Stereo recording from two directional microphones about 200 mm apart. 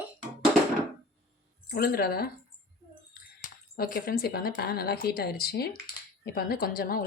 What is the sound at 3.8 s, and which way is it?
A woman's voice, 45° left (ahead or behind).